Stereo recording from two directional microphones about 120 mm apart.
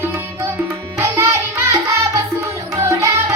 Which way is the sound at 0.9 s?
20° right (ahead or behind).